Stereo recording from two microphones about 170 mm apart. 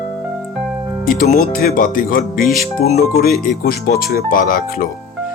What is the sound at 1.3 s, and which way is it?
Speech, 60° left (ahead or behind).